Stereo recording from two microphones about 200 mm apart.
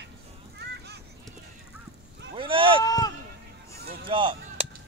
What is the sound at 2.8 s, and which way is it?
Speech, 20° left (ahead or behind).